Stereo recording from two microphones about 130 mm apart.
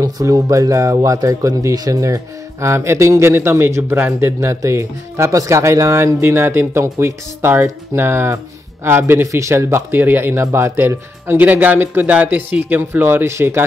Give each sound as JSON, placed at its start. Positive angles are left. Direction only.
{"t": 0.0, "sound": "speech", "side_deg": -25}